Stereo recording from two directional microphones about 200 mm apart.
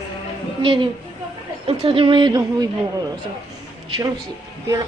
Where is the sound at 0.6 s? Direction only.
25° right (ahead or behind).